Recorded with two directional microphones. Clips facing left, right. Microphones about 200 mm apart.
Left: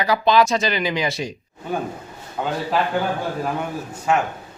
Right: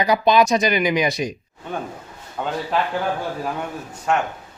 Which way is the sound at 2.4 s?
5° left (ahead or behind).